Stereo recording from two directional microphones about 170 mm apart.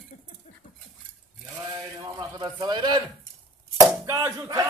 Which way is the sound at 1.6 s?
25° right (ahead or behind).